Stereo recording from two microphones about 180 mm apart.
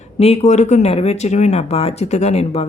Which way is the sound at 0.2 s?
40° left (ahead or behind).